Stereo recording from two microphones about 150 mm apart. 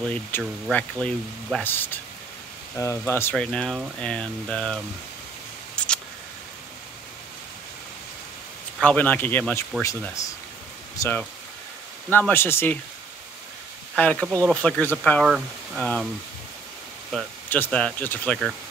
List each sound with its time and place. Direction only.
0.4 s speech: 5° left (ahead or behind)
5.8 s a sound: 5° left (ahead or behind)
8.8 s speech: 10° left (ahead or behind)
13.9 s speech: 10° left (ahead or behind)
17.5 s speech: 10° left (ahead or behind)